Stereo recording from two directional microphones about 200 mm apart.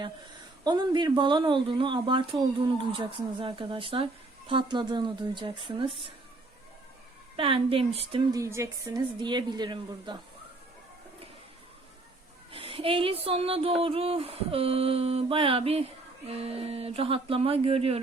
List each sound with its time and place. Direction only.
0.6 s speech: 20° right (ahead or behind)
7.3 s speech: 30° right (ahead or behind)
8.4 s speech: 15° right (ahead or behind)
12.5 s speech: 25° right (ahead or behind)